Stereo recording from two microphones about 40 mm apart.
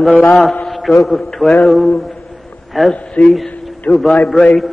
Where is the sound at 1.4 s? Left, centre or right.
Centre.